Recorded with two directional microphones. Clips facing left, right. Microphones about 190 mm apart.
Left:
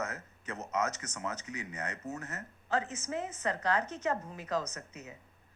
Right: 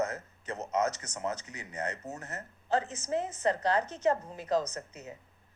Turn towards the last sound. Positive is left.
turn(degrees=-30)  # may be behind; listen again after turning